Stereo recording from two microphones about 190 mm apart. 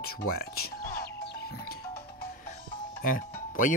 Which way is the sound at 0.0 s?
55° left (ahead or behind).